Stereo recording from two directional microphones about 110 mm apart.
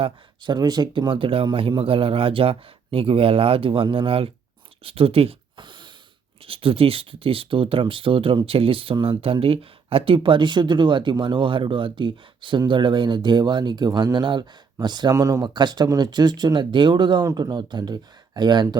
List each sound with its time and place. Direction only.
0.4 s a man's voice: 40° right (ahead or behind)
6.4 s speech: 55° right (ahead or behind)